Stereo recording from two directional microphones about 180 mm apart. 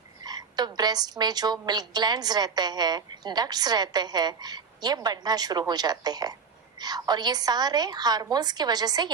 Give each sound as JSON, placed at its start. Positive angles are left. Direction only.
{"t": 0.2, "sound": "a woman's voice", "side_deg": -20}